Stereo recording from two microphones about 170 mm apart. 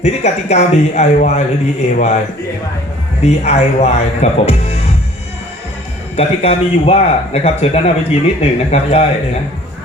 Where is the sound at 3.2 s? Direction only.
40° left (ahead or behind).